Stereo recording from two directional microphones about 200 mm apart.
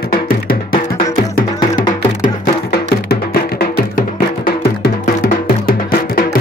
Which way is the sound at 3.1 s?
50° left (ahead or behind).